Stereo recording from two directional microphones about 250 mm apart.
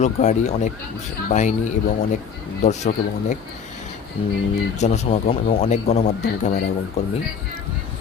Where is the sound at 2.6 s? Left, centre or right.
Left.